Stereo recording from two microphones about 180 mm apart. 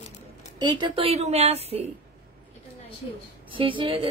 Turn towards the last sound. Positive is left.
turn(degrees=-30)  # may be behind; listen again after turning